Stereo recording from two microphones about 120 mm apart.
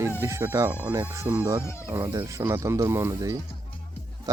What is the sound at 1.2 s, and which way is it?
Speech, 10° right (ahead or behind).